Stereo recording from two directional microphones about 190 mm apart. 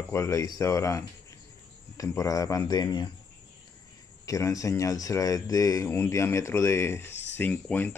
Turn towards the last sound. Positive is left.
turn(degrees=10)  # may be behind; listen again after turning